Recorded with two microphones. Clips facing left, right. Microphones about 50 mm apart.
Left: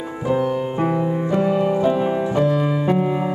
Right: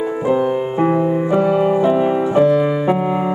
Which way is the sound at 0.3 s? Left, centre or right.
Centre.